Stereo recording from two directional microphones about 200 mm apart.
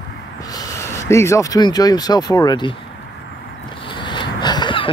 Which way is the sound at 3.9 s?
25° left (ahead or behind).